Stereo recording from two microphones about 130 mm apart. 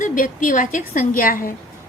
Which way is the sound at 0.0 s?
90° left.